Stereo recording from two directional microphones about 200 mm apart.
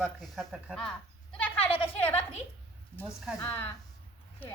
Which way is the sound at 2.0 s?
10° left (ahead or behind).